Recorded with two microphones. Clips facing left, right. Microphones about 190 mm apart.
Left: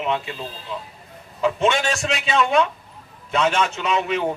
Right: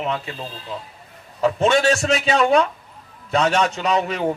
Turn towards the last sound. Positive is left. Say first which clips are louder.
# right 1 dB
turn(degrees=-35)  # may be behind; listen again after turning